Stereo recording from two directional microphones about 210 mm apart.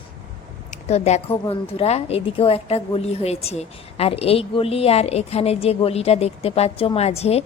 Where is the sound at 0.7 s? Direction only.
30° left (ahead or behind).